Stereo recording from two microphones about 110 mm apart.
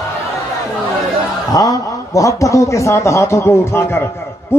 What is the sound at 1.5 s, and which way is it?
A man's voice, 30° left (ahead or behind).